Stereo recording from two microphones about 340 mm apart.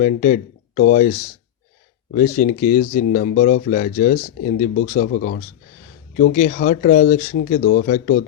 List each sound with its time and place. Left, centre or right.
0.0 s speech: left